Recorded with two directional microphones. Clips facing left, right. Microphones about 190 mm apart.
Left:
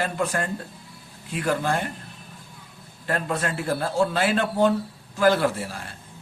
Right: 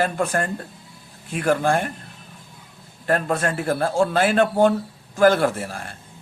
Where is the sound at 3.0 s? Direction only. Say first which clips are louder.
Right 5 dB; 50° right (ahead or behind).